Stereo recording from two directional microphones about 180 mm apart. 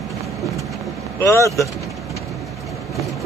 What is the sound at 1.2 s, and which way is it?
Speech, 15° left (ahead or behind).